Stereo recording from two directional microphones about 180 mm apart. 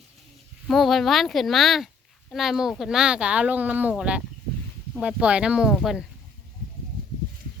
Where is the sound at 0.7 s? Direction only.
Centre (ahead or behind).